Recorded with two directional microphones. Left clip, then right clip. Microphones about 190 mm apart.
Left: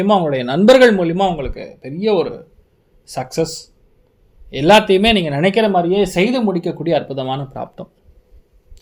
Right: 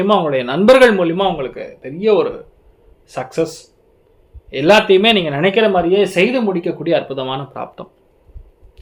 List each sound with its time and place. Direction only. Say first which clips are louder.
0.0 s speech: right 1 dB; 35° left (ahead or behind)